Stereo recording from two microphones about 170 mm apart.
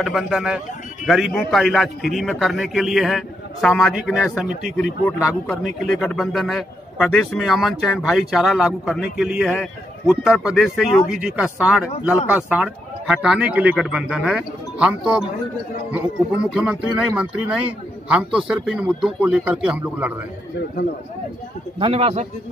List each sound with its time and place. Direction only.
0.0 s a man's voice: centre (ahead or behind)
16.4 s a man's voice: 5° right (ahead or behind)
21.7 s a man's voice: 35° right (ahead or behind)